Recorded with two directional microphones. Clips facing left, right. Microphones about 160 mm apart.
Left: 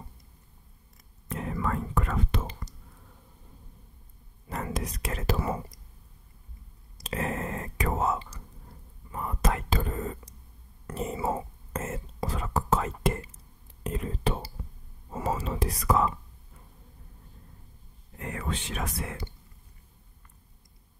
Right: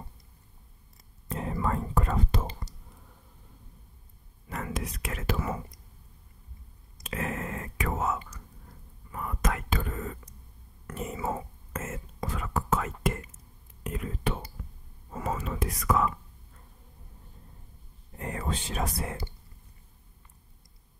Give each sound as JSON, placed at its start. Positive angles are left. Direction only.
{"t": 1.3, "sound": "whispering", "side_deg": -30}
{"t": 4.5, "sound": "speech", "side_deg": 35}
{"t": 7.0, "sound": "whispering", "side_deg": 35}
{"t": 18.1, "sound": "speech", "side_deg": -30}